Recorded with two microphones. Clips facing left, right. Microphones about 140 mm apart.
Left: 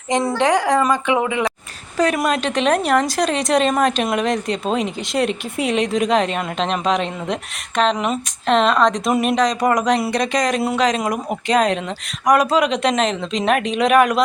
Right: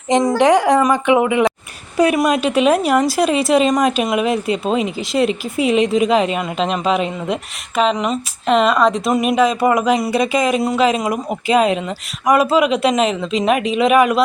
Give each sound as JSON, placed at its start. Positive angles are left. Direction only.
{"t": 0.1, "sound": "a woman's voice", "side_deg": -15}
{"t": 2.0, "sound": "a woman's voice", "side_deg": -5}